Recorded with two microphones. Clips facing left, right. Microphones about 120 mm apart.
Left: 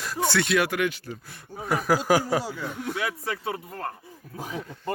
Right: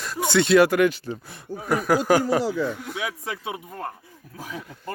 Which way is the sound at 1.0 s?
25° right (ahead or behind).